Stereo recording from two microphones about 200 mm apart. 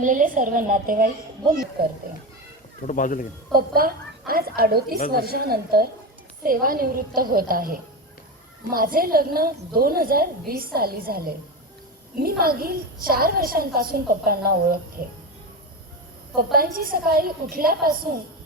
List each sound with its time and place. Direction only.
0.0 s a woman's voice: 40° right (ahead or behind)
2.8 s speech: 40° left (ahead or behind)
3.5 s a woman's voice: 45° right (ahead or behind)
16.3 s a woman's voice: 45° right (ahead or behind)